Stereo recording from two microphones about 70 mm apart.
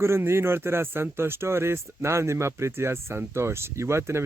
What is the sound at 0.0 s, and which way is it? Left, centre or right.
Speech, right.